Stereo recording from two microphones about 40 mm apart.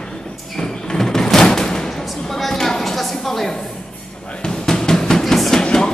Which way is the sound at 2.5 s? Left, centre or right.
Centre.